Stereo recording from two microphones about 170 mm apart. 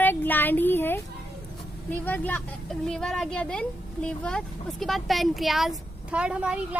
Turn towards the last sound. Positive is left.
turn(degrees=-10)  # may be behind; listen again after turning